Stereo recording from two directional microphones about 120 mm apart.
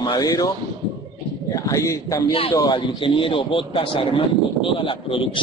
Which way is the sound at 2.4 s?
45° left (ahead or behind).